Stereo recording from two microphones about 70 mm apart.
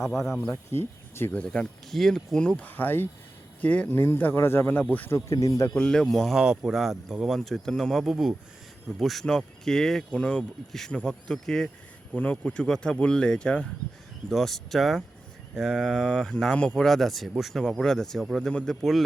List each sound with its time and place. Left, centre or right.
0.1 s speech: centre
0.7 s speech: left
1.5 s speech: centre
2.6 s speech: left
3.9 s speech: left
4.8 s speech: left
5.1 s speech: left
5.7 s speech: centre
10.7 s speech: centre
12.1 s speech: centre
14.3 s speech: centre